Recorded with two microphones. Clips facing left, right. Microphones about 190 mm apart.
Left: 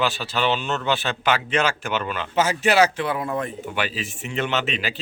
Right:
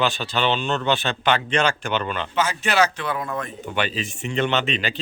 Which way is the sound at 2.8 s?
30° left (ahead or behind).